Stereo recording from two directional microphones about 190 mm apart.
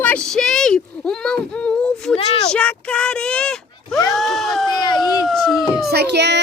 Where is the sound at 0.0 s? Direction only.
5° left (ahead or behind).